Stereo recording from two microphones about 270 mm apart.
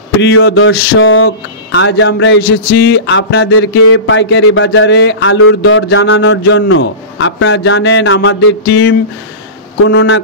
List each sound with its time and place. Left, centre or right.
0.2 s speech: left